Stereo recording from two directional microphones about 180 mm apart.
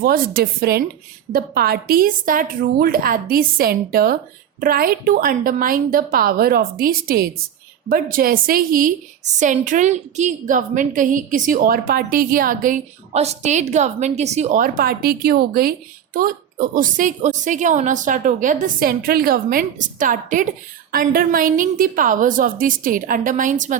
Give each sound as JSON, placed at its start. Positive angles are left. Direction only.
{"t": 0.0, "sound": "a woman's voice", "side_deg": -55}